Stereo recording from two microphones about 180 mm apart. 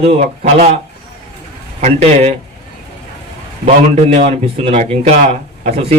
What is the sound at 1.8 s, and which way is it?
Speech, 35° right (ahead or behind).